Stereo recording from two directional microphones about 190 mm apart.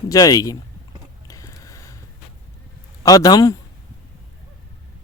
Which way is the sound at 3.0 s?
20° left (ahead or behind).